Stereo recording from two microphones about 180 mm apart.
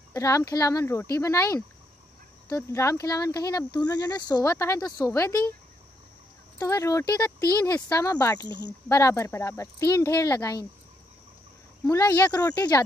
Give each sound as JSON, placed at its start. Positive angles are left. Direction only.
{"t": 0.1, "sound": "speech", "side_deg": 15}
{"t": 6.6, "sound": "speech", "side_deg": 20}
{"t": 8.5, "sound": "speech", "side_deg": -25}
{"t": 8.8, "sound": "speech", "side_deg": 15}
{"t": 11.9, "sound": "speech", "side_deg": 15}